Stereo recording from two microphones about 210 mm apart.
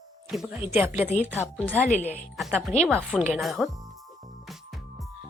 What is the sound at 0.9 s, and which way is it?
Speech, 35° left (ahead or behind).